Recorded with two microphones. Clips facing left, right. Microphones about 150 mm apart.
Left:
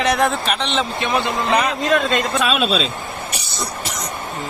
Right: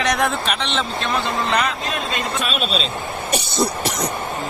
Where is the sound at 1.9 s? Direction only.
90° left.